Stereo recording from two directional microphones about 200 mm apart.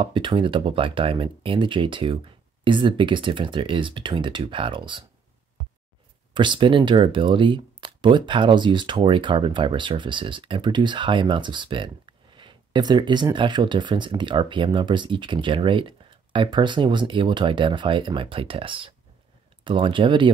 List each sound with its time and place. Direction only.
0.0 s speech: 25° right (ahead or behind)
6.3 s speech: 25° right (ahead or behind)